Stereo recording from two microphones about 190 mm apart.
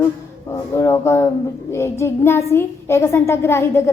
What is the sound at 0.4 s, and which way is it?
Speech, 15° left (ahead or behind).